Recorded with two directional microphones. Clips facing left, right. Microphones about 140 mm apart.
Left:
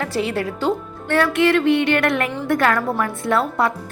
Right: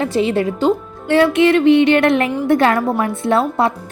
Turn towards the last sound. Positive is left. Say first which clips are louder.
# right 4 dB
turn(degrees=-25)  # may be behind; listen again after turning